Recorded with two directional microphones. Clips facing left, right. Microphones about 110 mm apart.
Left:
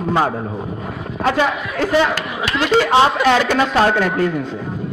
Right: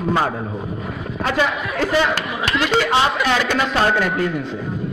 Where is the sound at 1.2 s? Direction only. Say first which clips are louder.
Left 3 dB; 40° left (ahead or behind).